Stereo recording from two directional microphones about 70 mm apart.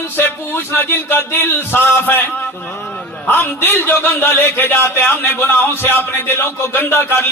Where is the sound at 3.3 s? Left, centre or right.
Left.